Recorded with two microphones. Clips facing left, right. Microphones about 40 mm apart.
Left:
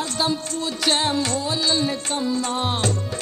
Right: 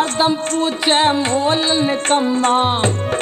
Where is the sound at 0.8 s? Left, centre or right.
Right.